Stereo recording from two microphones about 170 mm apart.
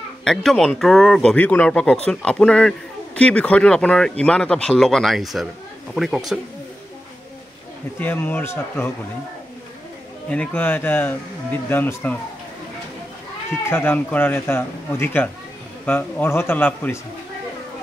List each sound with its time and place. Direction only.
0.2 s speech: centre (ahead or behind)
8.0 s speech: 10° left (ahead or behind)
10.3 s speech: 10° left (ahead or behind)
13.7 s speech: 15° left (ahead or behind)